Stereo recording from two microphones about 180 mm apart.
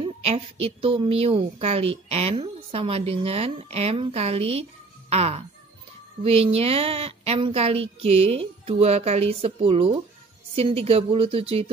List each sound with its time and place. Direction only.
0.0 s a woman's voice: 35° right (ahead or behind)